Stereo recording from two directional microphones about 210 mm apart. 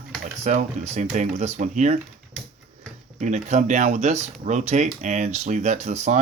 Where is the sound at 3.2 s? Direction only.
35° right (ahead or behind).